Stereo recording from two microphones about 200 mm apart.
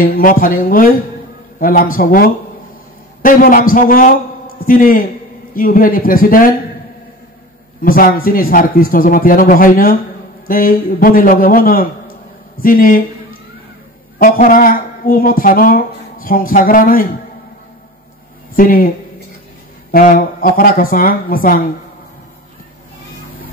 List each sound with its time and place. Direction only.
0.0 s a woman's voice: 45° left (ahead or behind)
7.8 s a woman's voice: 45° left (ahead or behind)
14.1 s a woman's voice: 45° left (ahead or behind)
18.6 s a woman's voice: 45° left (ahead or behind)
19.9 s a woman's voice: 45° left (ahead or behind)